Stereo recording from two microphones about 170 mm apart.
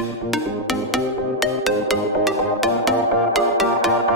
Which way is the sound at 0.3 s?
Centre (ahead or behind).